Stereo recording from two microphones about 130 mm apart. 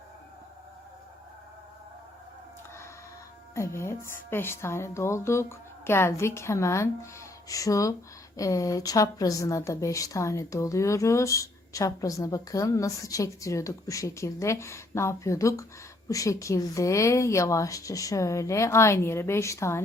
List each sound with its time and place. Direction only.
3.5 s a woman's voice: 20° left (ahead or behind)